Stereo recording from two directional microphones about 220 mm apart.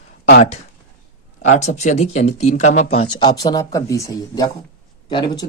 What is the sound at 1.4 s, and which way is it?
A man's voice, 35° left (ahead or behind).